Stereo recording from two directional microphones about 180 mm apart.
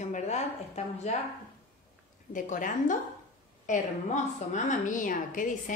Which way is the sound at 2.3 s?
45° left (ahead or behind).